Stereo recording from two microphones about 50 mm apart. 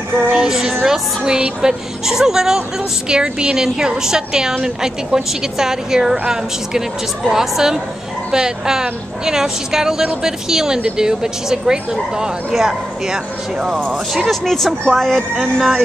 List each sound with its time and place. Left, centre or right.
0.3 s speech: centre
14.1 s speech: centre
15.3 s speech: centre